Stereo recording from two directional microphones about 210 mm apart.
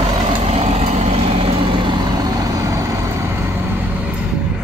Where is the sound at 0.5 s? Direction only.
30° right (ahead or behind); by 3.5 s 10° right (ahead or behind).